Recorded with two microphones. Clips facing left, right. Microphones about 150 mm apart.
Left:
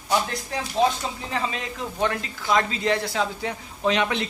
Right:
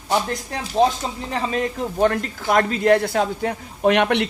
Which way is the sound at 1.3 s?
45° right (ahead or behind).